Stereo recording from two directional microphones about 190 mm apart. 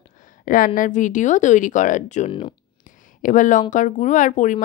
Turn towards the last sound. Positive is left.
turn(degrees=40)  # may be behind; listen again after turning